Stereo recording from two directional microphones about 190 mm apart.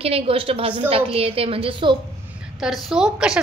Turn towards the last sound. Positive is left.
turn(degrees=-5)  # may be behind; listen again after turning